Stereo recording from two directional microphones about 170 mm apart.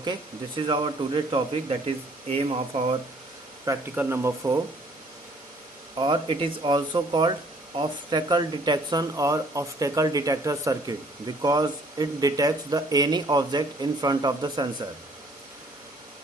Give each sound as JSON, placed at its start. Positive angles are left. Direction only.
{"t": 0.0, "sound": "speech", "side_deg": -30}
{"t": 3.7, "sound": "speech", "side_deg": -15}
{"t": 6.0, "sound": "speech", "side_deg": -30}